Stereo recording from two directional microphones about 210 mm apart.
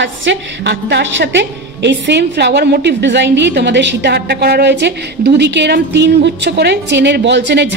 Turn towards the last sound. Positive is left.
turn(degrees=-55)  # may be behind; listen again after turning